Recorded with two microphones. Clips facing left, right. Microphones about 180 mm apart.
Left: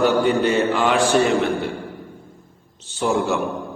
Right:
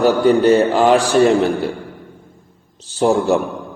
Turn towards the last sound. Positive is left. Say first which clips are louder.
# right 6 dB
turn(degrees=-35)  # may be behind; listen again after turning